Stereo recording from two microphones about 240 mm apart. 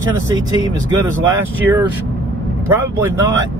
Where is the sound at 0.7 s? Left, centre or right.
Centre.